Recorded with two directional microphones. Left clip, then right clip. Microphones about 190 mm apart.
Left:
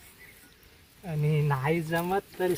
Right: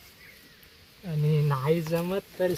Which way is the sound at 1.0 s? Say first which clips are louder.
Right 1 dB; 20° left (ahead or behind).